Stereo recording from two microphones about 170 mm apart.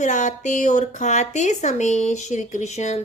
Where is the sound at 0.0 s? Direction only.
45° left (ahead or behind).